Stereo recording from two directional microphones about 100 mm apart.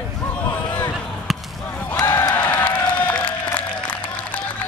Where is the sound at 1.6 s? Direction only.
15° left (ahead or behind).